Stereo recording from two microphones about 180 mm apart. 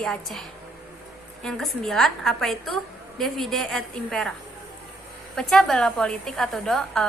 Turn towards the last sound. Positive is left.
turn(degrees=0)  # may be behind; listen again after turning